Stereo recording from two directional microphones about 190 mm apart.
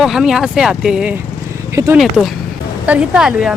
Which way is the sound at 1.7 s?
15° right (ahead or behind).